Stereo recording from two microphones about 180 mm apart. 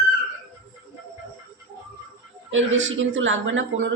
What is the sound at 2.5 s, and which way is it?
A woman's voice, 90° right.